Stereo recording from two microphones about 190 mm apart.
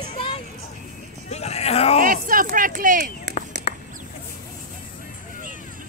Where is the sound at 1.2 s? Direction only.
35° left (ahead or behind).